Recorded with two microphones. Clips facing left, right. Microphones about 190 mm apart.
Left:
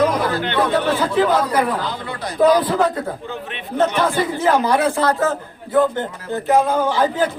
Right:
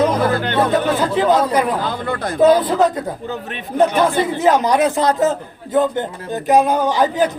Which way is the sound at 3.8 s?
20° right (ahead or behind).